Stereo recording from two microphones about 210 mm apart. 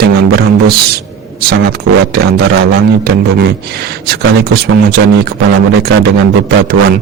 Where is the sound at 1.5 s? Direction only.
50° right (ahead or behind).